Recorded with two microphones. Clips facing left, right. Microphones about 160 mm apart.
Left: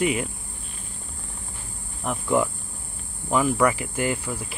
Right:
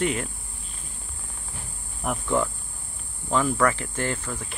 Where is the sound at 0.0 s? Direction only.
10° left (ahead or behind).